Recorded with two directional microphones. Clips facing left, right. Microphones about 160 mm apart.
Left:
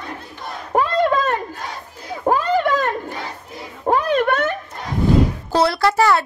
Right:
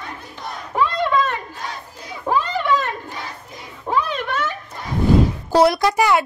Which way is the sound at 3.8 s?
50° left (ahead or behind).